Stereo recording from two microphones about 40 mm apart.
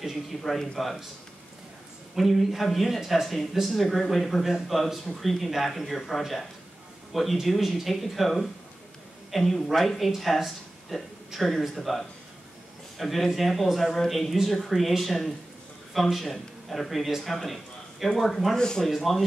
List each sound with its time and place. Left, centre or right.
0.0 s speech: centre
2.1 s speech: centre
18.6 s speech: centre
18.9 s speech: centre